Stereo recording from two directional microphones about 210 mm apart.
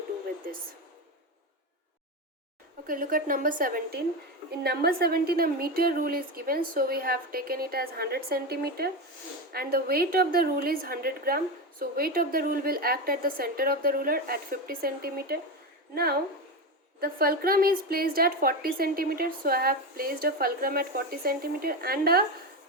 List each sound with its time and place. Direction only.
2.8 s a woman's voice: 40° right (ahead or behind)
17.0 s a woman's voice: 45° right (ahead or behind)